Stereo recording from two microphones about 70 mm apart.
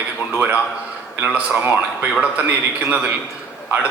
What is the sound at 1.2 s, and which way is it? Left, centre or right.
Speech, centre.